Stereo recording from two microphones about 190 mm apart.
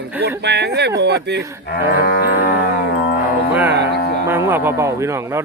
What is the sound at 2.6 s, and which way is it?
Music, 55° left (ahead or behind).